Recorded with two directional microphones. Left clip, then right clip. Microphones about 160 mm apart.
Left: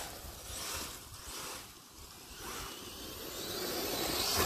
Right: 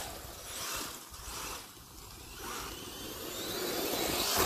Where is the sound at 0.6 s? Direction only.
5° right (ahead or behind).